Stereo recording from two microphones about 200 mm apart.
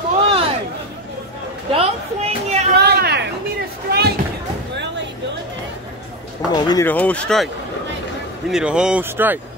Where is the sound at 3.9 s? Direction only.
55° right (ahead or behind).